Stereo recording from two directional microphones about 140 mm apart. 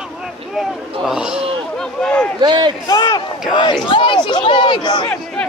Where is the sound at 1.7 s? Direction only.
5° left (ahead or behind).